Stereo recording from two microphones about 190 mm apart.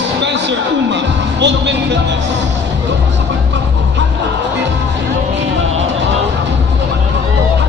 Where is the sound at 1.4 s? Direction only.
65° right (ahead or behind).